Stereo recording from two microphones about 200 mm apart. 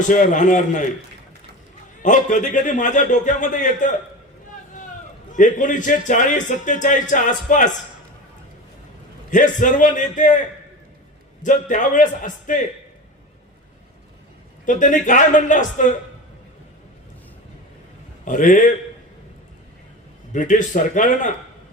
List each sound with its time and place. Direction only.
0.1 s a man's voice: 40° left (ahead or behind)
2.0 s a man's voice: 40° left (ahead or behind)
5.3 s a man's voice: 40° left (ahead or behind)
9.3 s a man's voice: 40° left (ahead or behind)
11.4 s a man's voice: 40° left (ahead or behind)
14.6 s a man's voice: 40° left (ahead or behind)
18.3 s a man's voice: 40° left (ahead or behind)
20.3 s a man's voice: 40° left (ahead or behind)